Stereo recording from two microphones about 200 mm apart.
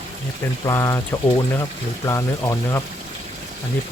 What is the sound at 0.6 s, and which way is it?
Speech, 15° left (ahead or behind).